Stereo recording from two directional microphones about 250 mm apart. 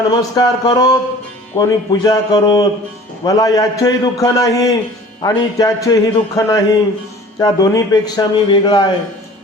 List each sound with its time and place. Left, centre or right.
0.2 s a man's voice: centre